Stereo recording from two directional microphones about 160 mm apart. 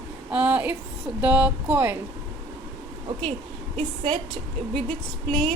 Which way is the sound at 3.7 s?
45° right (ahead or behind).